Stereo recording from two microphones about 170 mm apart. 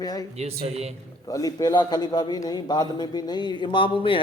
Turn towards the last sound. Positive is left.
turn(degrees=30)  # may be behind; listen again after turning